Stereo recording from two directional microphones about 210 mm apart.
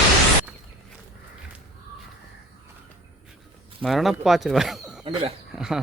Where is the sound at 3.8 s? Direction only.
Centre (ahead or behind).